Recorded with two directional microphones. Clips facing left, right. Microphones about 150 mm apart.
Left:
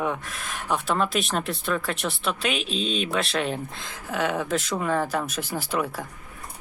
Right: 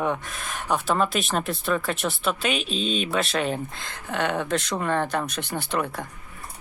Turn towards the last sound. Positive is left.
turn(degrees=5)  # may be behind; listen again after turning